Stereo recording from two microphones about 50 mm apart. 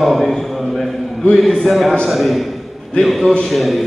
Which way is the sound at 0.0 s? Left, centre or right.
Centre.